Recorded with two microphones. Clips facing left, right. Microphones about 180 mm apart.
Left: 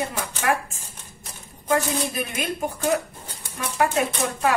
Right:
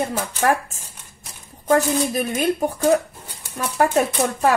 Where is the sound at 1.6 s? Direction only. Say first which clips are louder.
Right 5 dB; 40° right (ahead or behind).